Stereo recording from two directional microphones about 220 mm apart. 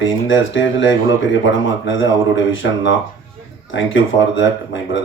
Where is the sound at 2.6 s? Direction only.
60° left (ahead or behind).